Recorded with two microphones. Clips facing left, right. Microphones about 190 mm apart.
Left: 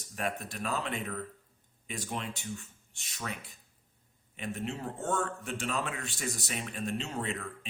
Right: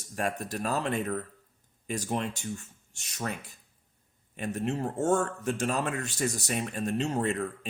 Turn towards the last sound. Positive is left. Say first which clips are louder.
# right 7 dB
turn(degrees=-45)  # may be behind; listen again after turning